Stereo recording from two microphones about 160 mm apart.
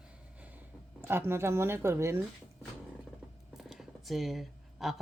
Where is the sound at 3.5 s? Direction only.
Centre (ahead or behind).